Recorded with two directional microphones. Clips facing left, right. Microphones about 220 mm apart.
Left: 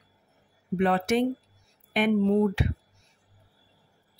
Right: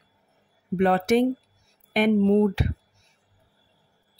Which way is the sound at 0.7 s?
40° right (ahead or behind).